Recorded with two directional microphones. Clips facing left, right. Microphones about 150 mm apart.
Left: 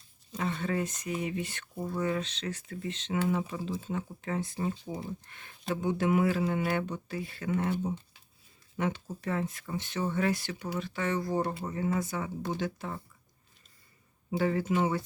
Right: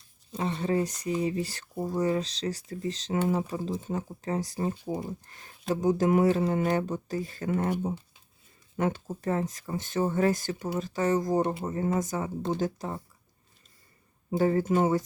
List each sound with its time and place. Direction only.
0.3 s speech: 30° right (ahead or behind)
14.3 s speech: 45° right (ahead or behind)